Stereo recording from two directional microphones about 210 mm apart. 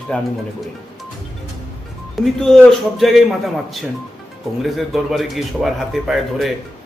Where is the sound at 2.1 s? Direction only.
Centre (ahead or behind).